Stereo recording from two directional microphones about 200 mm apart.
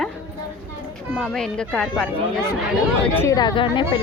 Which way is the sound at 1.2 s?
5° left (ahead or behind).